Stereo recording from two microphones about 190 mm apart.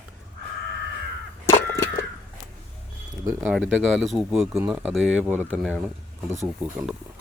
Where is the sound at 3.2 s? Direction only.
15° right (ahead or behind).